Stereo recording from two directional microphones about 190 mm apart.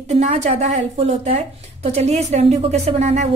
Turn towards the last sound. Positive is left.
turn(degrees=-35)  # may be behind; listen again after turning